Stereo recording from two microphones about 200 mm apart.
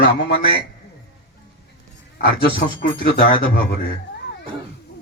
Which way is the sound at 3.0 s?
45° left (ahead or behind).